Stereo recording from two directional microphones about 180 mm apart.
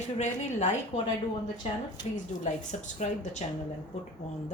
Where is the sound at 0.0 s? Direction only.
40° left (ahead or behind).